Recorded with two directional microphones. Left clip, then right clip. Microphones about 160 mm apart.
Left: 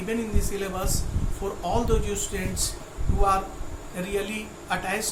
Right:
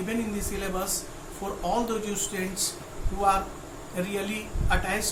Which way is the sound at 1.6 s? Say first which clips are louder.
Left 2 dB; 5° left (ahead or behind).